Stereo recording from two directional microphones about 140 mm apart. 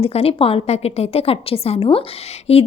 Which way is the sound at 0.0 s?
45° left (ahead or behind).